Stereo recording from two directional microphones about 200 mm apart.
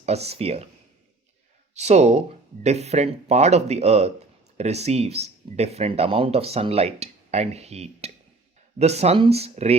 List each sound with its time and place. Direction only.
0.0 s speech: 30° right (ahead or behind)
1.7 s speech: 35° right (ahead or behind)